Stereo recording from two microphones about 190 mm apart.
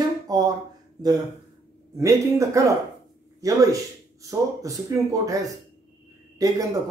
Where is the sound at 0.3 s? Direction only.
20° right (ahead or behind).